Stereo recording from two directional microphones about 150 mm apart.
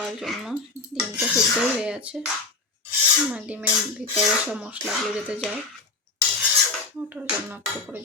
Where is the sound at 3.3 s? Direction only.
5° right (ahead or behind).